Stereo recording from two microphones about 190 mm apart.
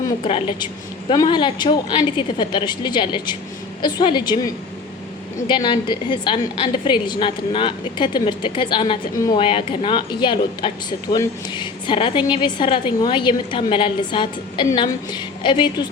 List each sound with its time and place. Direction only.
0.3 s a woman's voice: 30° left (ahead or behind)